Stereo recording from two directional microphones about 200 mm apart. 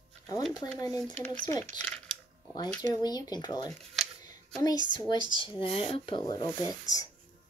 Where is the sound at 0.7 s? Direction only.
20° left (ahead or behind).